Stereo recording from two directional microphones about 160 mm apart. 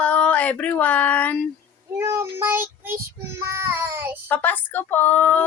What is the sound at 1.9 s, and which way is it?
Child singing, 15° right (ahead or behind).